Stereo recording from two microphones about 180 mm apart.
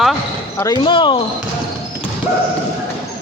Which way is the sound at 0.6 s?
25° left (ahead or behind).